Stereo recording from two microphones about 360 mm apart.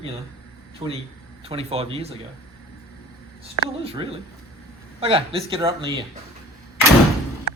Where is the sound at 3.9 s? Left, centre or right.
Centre.